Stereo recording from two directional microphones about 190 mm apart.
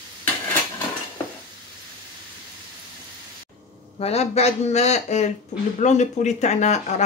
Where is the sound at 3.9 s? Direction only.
35° left (ahead or behind).